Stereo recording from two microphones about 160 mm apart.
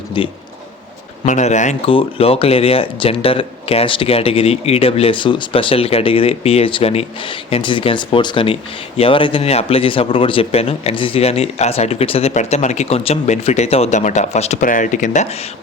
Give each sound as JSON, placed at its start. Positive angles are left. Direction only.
{"t": 0.2, "sound": "speech", "side_deg": 30}
{"t": 1.2, "sound": "a man's voice", "side_deg": 45}
{"t": 1.9, "sound": "speech", "side_deg": 35}